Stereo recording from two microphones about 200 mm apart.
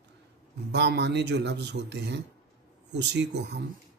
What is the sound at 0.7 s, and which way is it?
A man's voice, 60° right (ahead or behind).